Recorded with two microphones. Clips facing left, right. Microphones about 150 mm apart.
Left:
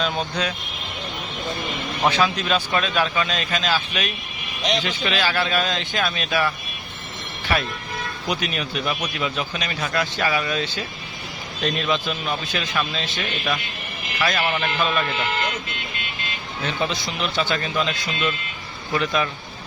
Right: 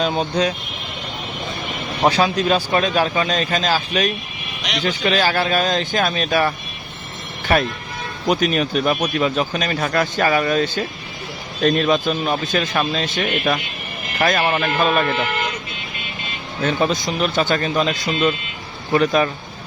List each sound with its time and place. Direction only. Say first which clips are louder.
0.0 s speech: right 5 dB; 35° right (ahead or behind)
2.0 s speech: right 4 dB; 35° right (ahead or behind)
7.5 s speech: right 6 dB; 50° right (ahead or behind)
16.6 s speech: right 7 dB; 45° right (ahead or behind)